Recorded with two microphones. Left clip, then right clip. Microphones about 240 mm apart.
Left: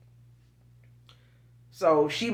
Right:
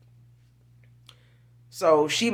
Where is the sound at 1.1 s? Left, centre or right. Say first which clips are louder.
Right 5 dB; right.